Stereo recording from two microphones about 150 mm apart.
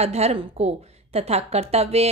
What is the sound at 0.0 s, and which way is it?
A woman's voice, 45° right (ahead or behind).